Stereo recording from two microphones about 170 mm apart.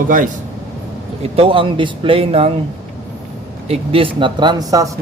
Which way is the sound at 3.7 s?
35° right (ahead or behind).